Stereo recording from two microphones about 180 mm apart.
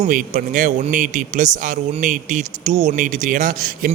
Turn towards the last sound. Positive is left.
turn(degrees=-50)  # may be behind; listen again after turning